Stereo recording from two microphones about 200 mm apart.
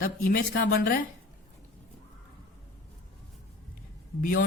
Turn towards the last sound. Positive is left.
turn(degrees=45)  # may be behind; listen again after turning